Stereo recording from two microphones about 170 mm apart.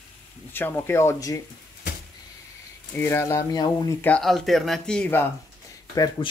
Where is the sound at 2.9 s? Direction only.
15° left (ahead or behind).